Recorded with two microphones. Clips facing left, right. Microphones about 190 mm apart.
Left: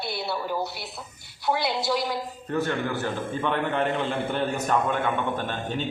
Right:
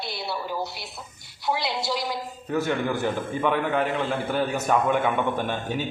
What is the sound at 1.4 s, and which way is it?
A man's voice, centre (ahead or behind).